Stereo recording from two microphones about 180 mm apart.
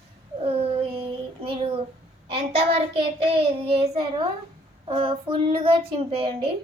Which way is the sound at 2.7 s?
30° right (ahead or behind).